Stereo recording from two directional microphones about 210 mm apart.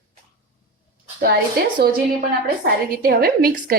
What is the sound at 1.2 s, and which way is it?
A woman's voice, 45° right (ahead or behind).